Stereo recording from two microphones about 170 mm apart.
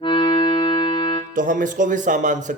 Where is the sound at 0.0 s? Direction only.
30° left (ahead or behind).